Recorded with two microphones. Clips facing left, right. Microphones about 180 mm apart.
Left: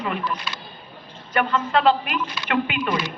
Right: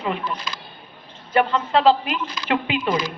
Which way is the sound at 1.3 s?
25° right (ahead or behind).